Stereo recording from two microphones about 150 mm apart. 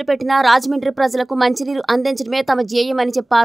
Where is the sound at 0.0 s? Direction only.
Centre (ahead or behind).